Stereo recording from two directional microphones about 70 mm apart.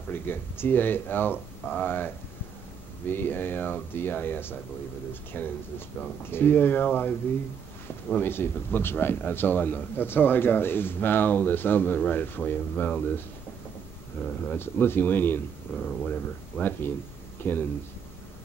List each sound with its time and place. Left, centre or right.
0.1 s a man's voice: left
14.2 s speech: left
15.7 s a man's voice: centre; by 17.6 s left